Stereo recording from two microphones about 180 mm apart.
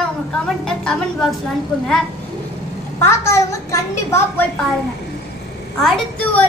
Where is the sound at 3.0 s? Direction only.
15° left (ahead or behind).